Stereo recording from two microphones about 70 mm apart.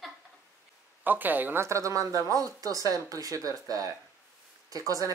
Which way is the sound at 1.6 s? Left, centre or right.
Right.